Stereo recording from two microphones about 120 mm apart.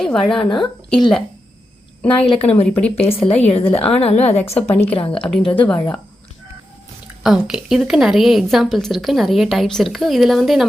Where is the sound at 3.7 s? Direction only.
55° left (ahead or behind).